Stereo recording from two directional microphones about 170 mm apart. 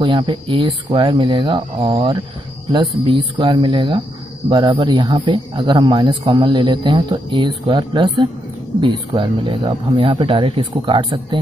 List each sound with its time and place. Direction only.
0.0 s a man's voice: 30° right (ahead or behind)